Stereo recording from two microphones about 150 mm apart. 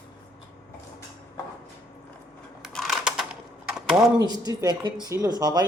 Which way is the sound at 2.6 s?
Centre (ahead or behind).